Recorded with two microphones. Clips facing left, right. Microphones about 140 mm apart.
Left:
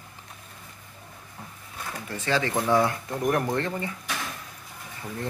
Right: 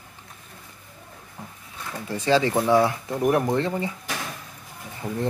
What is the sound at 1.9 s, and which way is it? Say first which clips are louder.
Speech: right 6 dB; 15° right (ahead or behind).